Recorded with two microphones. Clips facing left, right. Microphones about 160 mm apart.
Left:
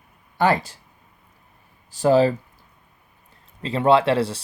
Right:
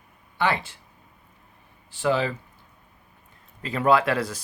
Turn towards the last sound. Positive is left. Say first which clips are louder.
# left 4 dB
turn(degrees=30)  # may be behind; listen again after turning